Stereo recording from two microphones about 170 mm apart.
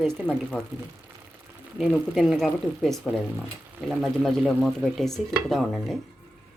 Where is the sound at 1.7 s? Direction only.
Centre (ahead or behind).